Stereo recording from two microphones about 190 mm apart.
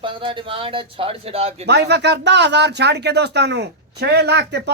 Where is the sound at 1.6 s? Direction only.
60° right (ahead or behind).